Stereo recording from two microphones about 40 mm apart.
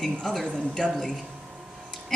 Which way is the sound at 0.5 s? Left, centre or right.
Centre.